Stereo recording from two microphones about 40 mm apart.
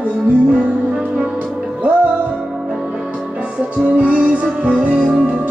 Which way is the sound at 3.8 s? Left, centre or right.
Right.